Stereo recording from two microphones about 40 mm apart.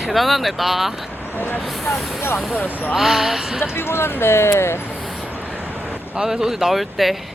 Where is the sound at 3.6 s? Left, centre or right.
Left.